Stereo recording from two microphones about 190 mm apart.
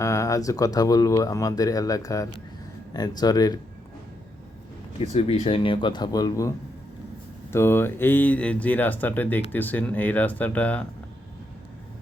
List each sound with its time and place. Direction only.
0.0 s a man's voice: 15° left (ahead or behind)
4.9 s a man's voice: 35° left (ahead or behind)
7.5 s speech: 10° left (ahead or behind)